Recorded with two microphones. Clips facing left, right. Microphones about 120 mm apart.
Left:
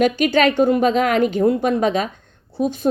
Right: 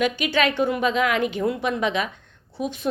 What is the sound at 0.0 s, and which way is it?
A woman's voice, 45° left (ahead or behind).